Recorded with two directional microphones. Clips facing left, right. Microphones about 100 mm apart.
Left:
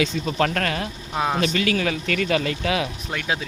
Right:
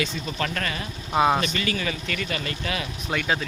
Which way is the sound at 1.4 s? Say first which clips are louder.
Left 5 dB; 90° left.